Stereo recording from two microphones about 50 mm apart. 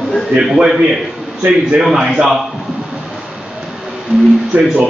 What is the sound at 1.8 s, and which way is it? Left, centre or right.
Speech, centre.